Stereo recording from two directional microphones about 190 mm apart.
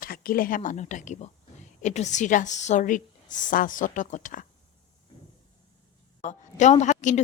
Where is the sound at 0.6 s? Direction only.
40° left (ahead or behind).